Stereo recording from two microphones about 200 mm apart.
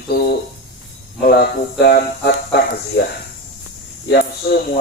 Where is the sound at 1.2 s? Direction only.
55° left (ahead or behind).